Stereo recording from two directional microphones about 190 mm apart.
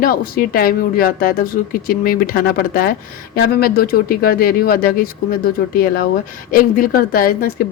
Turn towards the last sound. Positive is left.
turn(degrees=50)  # may be behind; listen again after turning